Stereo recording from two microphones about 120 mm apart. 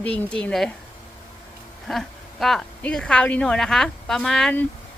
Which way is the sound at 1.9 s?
Centre (ahead or behind).